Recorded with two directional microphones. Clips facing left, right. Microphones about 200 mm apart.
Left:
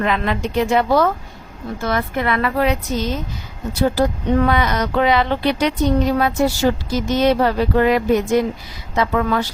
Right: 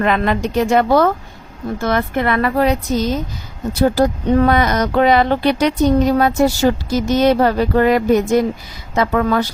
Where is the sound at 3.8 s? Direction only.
40° right (ahead or behind).